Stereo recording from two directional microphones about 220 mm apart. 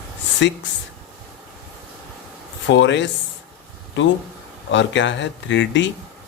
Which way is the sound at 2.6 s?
55° left (ahead or behind).